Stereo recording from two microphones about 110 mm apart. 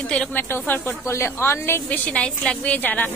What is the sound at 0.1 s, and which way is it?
A woman's voice, 10° left (ahead or behind).